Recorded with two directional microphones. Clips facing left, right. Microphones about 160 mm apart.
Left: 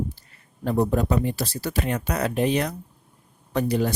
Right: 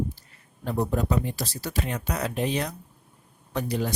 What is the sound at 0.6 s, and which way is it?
Speech, 60° left (ahead or behind).